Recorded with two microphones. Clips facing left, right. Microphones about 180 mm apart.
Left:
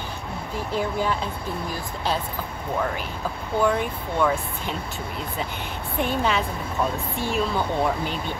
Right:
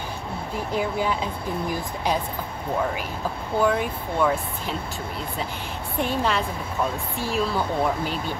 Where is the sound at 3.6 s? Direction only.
5° right (ahead or behind).